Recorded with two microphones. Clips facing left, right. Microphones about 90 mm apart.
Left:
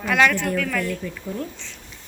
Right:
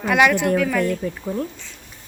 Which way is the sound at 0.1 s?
15° right (ahead or behind).